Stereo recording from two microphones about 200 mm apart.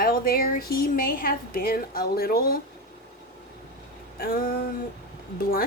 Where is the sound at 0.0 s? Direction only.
45° left (ahead or behind).